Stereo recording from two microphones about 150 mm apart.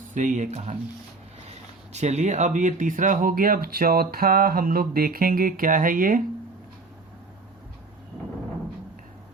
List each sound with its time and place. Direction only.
0.1 s speech: 55° right (ahead or behind)